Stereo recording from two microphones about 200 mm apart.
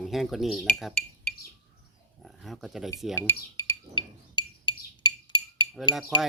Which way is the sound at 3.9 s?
20° left (ahead or behind).